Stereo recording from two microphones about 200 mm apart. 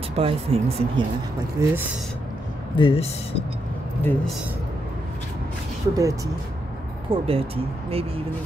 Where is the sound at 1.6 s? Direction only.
15° right (ahead or behind).